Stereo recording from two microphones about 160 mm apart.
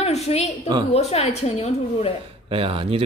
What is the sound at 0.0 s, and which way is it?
A woman's voice, 40° left (ahead or behind).